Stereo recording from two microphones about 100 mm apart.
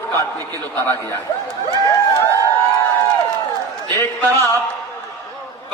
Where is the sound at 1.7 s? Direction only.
40° left (ahead or behind).